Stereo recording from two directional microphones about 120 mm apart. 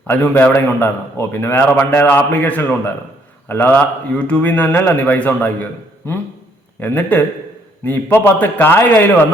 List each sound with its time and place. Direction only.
0.1 s a man's voice: 15° left (ahead or behind)
6.7 s a man's voice: 15° left (ahead or behind)